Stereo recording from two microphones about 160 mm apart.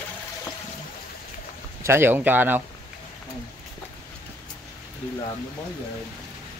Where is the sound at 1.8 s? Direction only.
15° right (ahead or behind).